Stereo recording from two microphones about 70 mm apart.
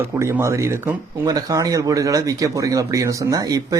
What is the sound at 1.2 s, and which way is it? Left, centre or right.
Speech, right.